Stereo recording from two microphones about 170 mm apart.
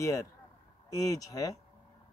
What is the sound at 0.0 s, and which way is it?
A man's voice, 15° left (ahead or behind).